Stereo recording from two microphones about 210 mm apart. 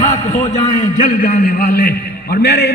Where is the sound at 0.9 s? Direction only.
40° left (ahead or behind).